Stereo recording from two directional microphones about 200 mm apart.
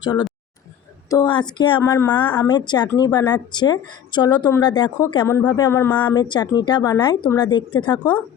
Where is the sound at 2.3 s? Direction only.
15° left (ahead or behind).